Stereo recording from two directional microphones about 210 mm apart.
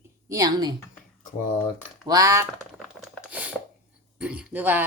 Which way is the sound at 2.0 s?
15° right (ahead or behind).